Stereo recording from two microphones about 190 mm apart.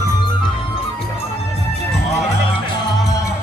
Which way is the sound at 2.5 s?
20° left (ahead or behind).